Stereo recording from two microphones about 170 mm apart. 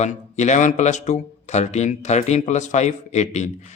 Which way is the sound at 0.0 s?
45° left (ahead or behind).